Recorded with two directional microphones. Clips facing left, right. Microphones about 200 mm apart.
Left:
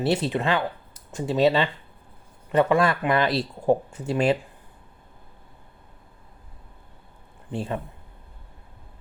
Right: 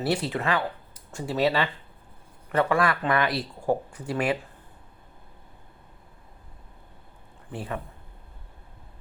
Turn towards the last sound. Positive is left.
turn(degrees=25)  # may be behind; listen again after turning